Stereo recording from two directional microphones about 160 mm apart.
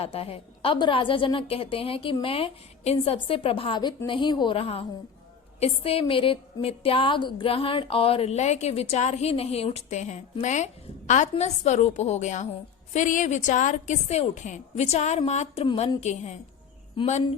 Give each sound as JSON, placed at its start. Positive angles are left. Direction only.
{"t": 0.0, "sound": "a woman's voice", "side_deg": 35}
{"t": 17.0, "sound": "speech", "side_deg": 30}